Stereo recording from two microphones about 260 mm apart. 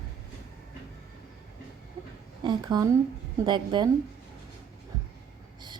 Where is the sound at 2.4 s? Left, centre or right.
Centre.